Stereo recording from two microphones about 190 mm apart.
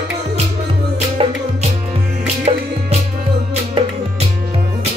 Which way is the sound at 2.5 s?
30° right (ahead or behind).